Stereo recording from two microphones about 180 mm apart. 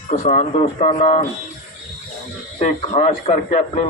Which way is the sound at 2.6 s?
45° left (ahead or behind).